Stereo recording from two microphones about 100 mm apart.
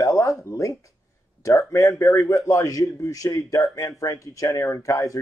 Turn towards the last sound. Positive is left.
turn(degrees=35)  # may be behind; listen again after turning